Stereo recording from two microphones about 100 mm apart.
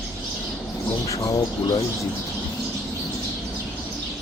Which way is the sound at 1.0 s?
35° left (ahead or behind).